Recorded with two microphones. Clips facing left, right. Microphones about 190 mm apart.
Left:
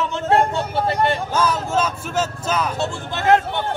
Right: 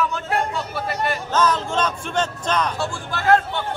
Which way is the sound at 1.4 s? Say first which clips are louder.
Right 2 dB; 10° left (ahead or behind).